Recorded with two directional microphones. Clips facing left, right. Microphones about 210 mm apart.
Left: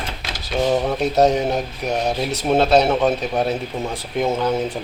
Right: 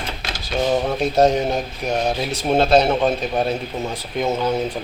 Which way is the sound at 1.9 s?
5° right (ahead or behind).